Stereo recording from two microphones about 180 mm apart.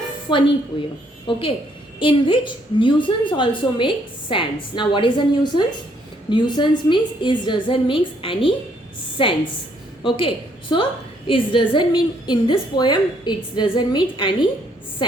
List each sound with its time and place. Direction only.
0.3 s a woman's voice: 25° left (ahead or behind)